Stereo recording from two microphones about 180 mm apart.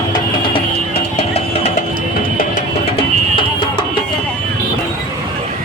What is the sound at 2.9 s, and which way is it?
Music, 30° left (ahead or behind).